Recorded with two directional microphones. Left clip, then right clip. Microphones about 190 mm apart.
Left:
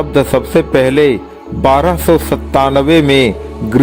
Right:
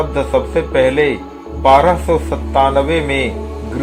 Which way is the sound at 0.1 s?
45° left (ahead or behind).